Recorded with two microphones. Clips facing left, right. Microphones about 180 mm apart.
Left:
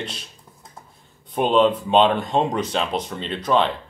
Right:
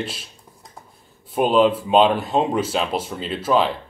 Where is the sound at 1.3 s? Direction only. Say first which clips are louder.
Right 1 dB; 5° right (ahead or behind).